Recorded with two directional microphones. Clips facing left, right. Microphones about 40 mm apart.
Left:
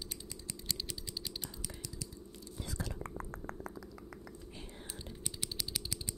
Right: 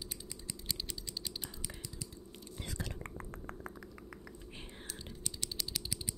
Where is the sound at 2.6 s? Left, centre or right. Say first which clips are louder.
Left 1 dB; right.